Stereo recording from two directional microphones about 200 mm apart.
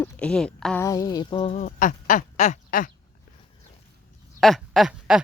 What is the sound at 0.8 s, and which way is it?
Duck, 20° left (ahead or behind).